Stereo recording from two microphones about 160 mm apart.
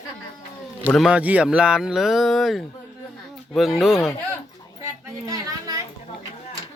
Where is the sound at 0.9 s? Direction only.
5° right (ahead or behind).